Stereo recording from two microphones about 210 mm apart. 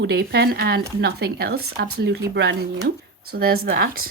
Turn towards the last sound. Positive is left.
turn(degrees=-45)  # may be behind; listen again after turning